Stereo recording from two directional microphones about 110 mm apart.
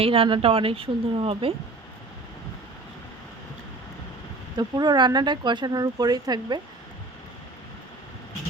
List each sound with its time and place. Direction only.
0.0 s speech: 60° right (ahead or behind)
4.5 s speech: 40° right (ahead or behind)